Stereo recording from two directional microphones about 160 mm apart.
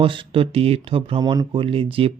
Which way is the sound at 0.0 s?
35° right (ahead or behind).